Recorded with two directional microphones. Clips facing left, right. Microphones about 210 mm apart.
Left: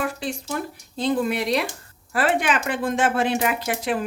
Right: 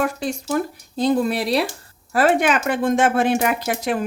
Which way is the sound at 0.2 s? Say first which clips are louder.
Right 6 dB; 45° right (ahead or behind).